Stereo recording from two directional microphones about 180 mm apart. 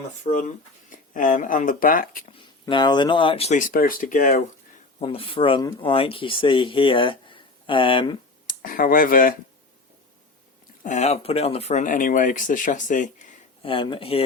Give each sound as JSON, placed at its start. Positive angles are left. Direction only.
{"t": 0.3, "sound": "speech", "side_deg": 45}
{"t": 2.3, "sound": "speech", "side_deg": 25}
{"t": 3.7, "sound": "speech", "side_deg": 50}
{"t": 4.9, "sound": "speech", "side_deg": 30}
{"t": 8.4, "sound": "speech", "side_deg": 50}
{"t": 10.8, "sound": "speech", "side_deg": 40}
{"t": 13.6, "sound": "speech", "side_deg": 30}